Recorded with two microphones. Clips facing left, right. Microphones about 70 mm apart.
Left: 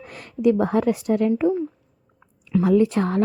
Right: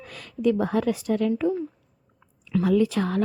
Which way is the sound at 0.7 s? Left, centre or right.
Left.